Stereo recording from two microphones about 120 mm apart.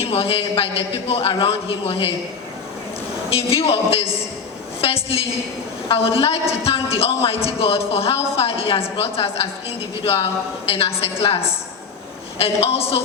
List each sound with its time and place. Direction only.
0.0 s speech: 55° left (ahead or behind)
3.2 s speech: 55° left (ahead or behind)
12.4 s speech: 55° left (ahead or behind)